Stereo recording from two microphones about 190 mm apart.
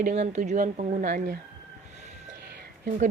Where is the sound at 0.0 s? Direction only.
40° right (ahead or behind).